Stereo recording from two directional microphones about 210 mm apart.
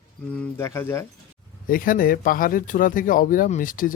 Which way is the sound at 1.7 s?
40° left (ahead or behind).